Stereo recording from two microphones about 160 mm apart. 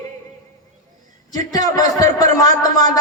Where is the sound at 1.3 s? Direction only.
25° left (ahead or behind).